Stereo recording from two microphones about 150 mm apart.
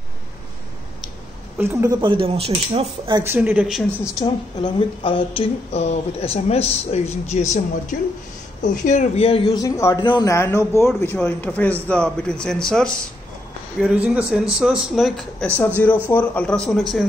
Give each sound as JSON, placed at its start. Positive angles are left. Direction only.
{"t": 1.6, "sound": "a woman's voice", "side_deg": -20}
{"t": 2.0, "sound": "speech", "side_deg": -35}
{"t": 3.3, "sound": "speech", "side_deg": -10}
{"t": 4.1, "sound": "a woman's voice", "side_deg": 30}
{"t": 9.6, "sound": "a man's voice", "side_deg": 20}
{"t": 10.3, "sound": "speech", "side_deg": 20}
{"t": 13.8, "sound": "speech", "side_deg": -10}
{"t": 16.1, "sound": "speech", "side_deg": 10}